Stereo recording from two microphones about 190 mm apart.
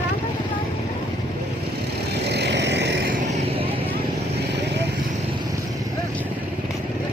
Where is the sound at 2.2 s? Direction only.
60° right (ahead or behind).